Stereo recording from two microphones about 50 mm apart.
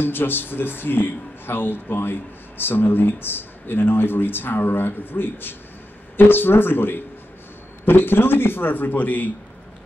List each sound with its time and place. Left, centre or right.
0.0 s speech: left